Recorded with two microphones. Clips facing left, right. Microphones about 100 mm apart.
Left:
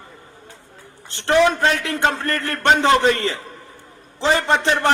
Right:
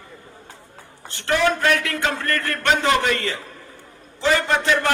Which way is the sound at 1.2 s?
25° left (ahead or behind).